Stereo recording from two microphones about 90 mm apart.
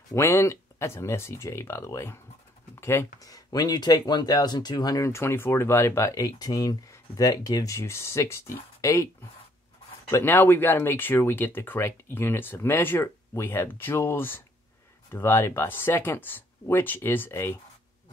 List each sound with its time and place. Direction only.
0.1 s speech: 30° left (ahead or behind)
3.2 s speech: 45° left (ahead or behind)
5.1 s speech: 25° left (ahead or behind)
10.1 s speech: 25° left (ahead or behind)